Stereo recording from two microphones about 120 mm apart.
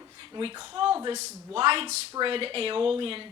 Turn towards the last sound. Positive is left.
turn(degrees=-50)  # may be behind; listen again after turning